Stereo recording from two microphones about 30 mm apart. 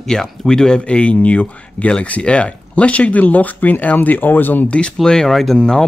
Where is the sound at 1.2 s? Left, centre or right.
Left.